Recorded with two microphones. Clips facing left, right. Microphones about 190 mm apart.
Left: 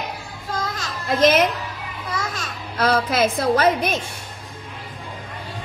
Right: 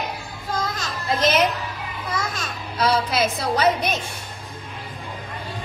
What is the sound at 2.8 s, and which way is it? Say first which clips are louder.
A woman's voice: left 2 dB; 55° left (ahead or behind).